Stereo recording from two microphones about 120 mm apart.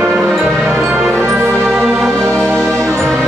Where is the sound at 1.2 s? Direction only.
20° right (ahead or behind).